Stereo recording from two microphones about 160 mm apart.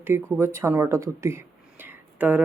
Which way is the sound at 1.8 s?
10° right (ahead or behind).